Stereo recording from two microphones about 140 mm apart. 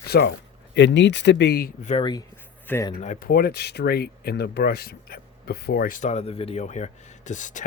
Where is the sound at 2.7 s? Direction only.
15° left (ahead or behind).